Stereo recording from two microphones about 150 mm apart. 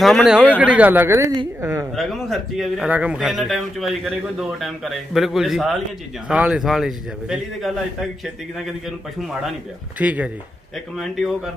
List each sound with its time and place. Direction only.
0.0 s speech: centre (ahead or behind); by 1.9 s 15° right (ahead or behind)
2.0 s speech: centre (ahead or behind)
9.2 s speech: 5° right (ahead or behind)
11.0 s speech: centre (ahead or behind)